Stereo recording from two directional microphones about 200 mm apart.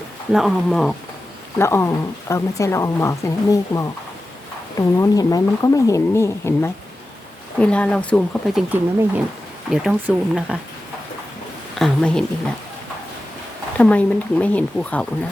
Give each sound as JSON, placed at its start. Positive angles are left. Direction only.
{"t": 0.3, "sound": "speech", "side_deg": 0}
{"t": 1.5, "sound": "a woman's voice", "side_deg": 15}
{"t": 4.9, "sound": "a woman's voice", "side_deg": 15}
{"t": 8.7, "sound": "speech", "side_deg": -10}
{"t": 11.8, "sound": "speech", "side_deg": 5}
{"t": 13.7, "sound": "a woman's voice", "side_deg": 5}